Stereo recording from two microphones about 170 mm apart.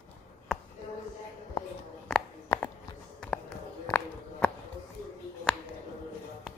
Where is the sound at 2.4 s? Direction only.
15° left (ahead or behind).